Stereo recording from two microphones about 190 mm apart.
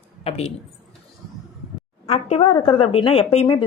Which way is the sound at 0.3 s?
35° left (ahead or behind).